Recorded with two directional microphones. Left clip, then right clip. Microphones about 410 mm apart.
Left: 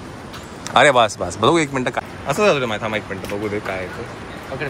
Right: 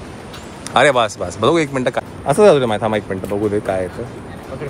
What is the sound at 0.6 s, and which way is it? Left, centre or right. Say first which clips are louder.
Speech: even; centre.